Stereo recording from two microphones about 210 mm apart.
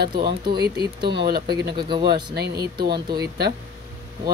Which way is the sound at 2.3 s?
50° right (ahead or behind).